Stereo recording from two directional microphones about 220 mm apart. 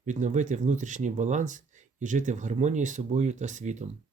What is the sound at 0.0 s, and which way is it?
Speech, 35° right (ahead or behind).